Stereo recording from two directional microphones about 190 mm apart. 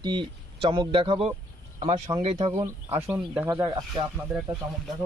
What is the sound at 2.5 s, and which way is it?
Speech, 15° right (ahead or behind).